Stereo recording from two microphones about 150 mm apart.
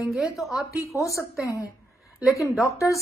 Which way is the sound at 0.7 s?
20° left (ahead or behind).